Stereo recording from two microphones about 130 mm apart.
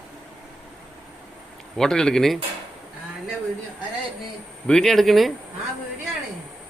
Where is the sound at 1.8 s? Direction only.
5° left (ahead or behind).